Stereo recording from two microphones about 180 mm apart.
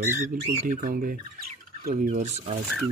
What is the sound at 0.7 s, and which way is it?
Speech, 45° right (ahead or behind).